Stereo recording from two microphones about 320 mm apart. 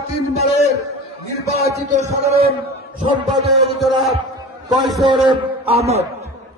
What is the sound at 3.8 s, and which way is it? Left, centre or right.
Speech, centre.